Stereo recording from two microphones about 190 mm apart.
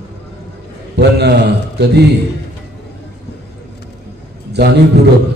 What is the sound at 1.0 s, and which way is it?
A man's voice, 60° right (ahead or behind).